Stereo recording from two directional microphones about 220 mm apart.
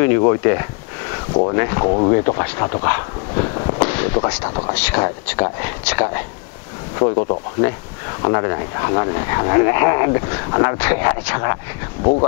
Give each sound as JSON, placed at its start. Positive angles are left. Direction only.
{"t": 0.2, "sound": "speech", "side_deg": 20}
{"t": 3.8, "sound": "a sound", "side_deg": 10}
{"t": 4.4, "sound": "speech", "side_deg": 25}
{"t": 4.7, "sound": "speech", "side_deg": 10}
{"t": 7.0, "sound": "speech", "side_deg": 30}
{"t": 12.0, "sound": "speech", "side_deg": 30}